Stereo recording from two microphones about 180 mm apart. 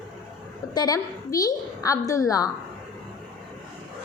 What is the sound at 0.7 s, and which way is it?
A woman's voice, 20° left (ahead or behind).